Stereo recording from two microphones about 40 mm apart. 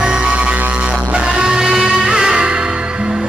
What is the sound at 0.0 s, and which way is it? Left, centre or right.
Music, right.